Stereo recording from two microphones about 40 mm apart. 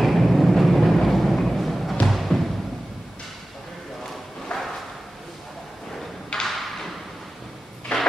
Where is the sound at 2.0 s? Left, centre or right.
Centre.